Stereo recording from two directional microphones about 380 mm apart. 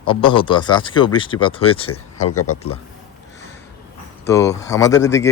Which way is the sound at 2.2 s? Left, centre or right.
Left.